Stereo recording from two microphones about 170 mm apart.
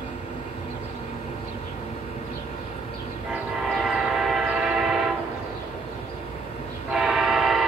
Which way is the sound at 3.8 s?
Centre (ahead or behind).